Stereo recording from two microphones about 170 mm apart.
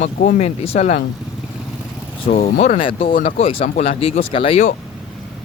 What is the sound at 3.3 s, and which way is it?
Speech, 45° left (ahead or behind).